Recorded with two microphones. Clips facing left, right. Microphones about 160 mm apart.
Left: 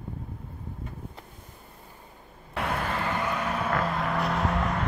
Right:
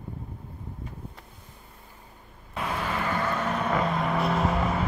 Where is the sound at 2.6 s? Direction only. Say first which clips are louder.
Left 1 dB; 70° left (ahead or behind).